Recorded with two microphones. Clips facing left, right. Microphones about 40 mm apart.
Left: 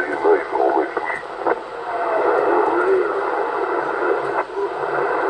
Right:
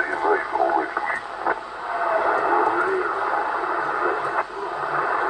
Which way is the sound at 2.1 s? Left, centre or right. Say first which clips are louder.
Left 3 dB; centre.